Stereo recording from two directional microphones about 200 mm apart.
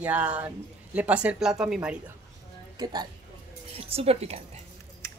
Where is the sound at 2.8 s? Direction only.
20° right (ahead or behind).